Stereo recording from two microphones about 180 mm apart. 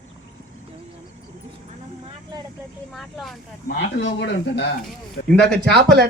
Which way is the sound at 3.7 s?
85° left.